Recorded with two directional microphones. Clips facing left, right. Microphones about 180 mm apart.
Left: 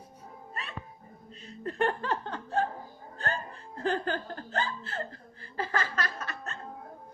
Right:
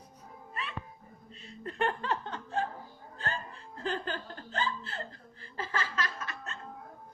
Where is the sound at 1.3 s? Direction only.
45° left (ahead or behind).